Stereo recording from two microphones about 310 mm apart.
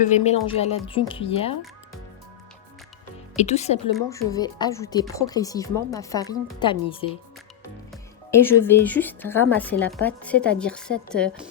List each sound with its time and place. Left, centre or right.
0.0 s speech: left
3.3 s speech: left
3.9 s speech: centre
8.3 s a woman's voice: centre